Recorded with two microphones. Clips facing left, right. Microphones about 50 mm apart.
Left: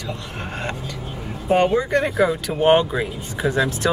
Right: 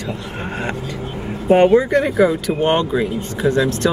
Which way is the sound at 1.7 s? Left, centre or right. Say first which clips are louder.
Right 5 dB; centre.